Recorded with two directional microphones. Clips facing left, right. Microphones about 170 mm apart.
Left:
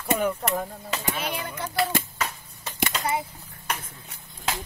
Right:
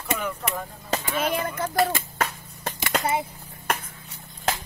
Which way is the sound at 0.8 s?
50° right (ahead or behind).